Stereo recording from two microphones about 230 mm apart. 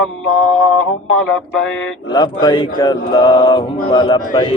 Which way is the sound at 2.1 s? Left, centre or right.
Centre.